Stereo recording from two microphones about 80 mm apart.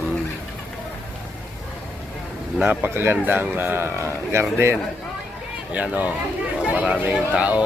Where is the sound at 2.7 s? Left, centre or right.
Right.